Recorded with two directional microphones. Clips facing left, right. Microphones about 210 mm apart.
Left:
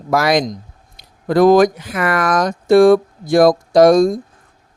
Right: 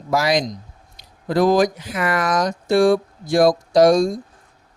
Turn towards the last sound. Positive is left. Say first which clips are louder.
# left 4 dB
turn(degrees=55)  # may be behind; listen again after turning